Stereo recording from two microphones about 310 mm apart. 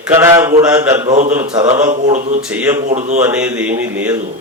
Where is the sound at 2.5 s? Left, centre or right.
Centre.